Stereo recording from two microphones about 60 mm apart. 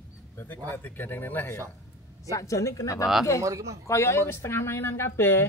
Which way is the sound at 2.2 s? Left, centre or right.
Left.